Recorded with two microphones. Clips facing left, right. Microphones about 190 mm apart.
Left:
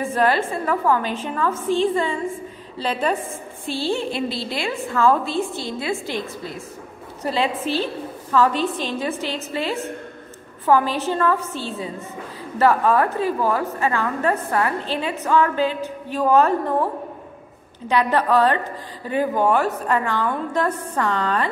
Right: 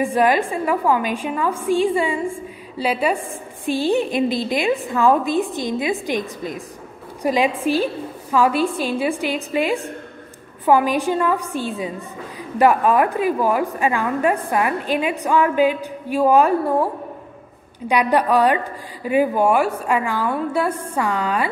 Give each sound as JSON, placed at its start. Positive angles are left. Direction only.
{"t": 0.0, "sound": "a woman's voice", "side_deg": -15}